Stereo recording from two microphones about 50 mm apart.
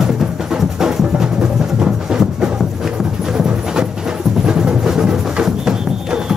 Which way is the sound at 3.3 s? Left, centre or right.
Centre.